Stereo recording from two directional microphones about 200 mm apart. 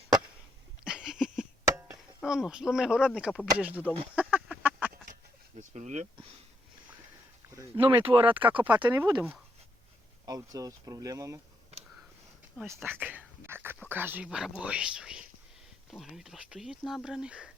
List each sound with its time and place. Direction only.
0.9 s a sound: 5° right (ahead or behind)
1.6 s chop: 5° right (ahead or behind)
3.2 s speech: 5° right (ahead or behind)
4.1 s duck: 5° right (ahead or behind)
5.5 s a sound: 35° right (ahead or behind)
7.7 s speech: 25° right (ahead or behind)
10.2 s speech: 20° right (ahead or behind)
12.6 s speech: 10° right (ahead or behind)